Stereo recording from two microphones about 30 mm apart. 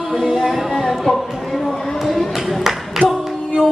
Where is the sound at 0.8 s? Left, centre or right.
Centre.